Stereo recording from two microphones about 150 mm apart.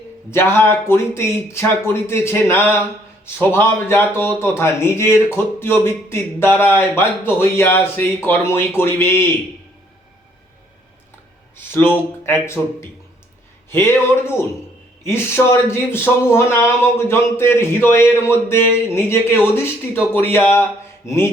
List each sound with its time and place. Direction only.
0.3 s speech: 15° left (ahead or behind)
11.5 s speech: 15° left (ahead or behind)